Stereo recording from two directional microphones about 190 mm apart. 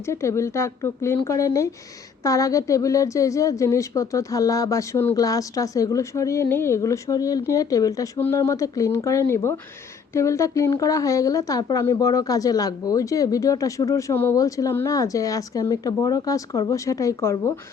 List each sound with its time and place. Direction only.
0.1 s a woman's voice: 15° left (ahead or behind)